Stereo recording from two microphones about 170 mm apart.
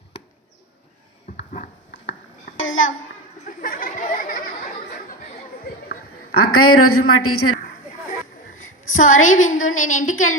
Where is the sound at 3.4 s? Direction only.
55° left (ahead or behind).